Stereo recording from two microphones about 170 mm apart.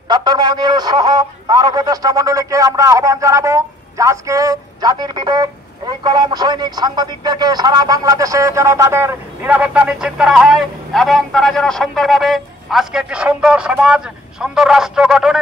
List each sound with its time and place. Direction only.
0.1 s speech: 25° right (ahead or behind); by 15.3 s 5° right (ahead or behind)